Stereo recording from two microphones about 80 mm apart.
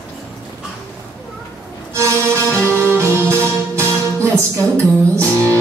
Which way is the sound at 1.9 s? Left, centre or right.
Right.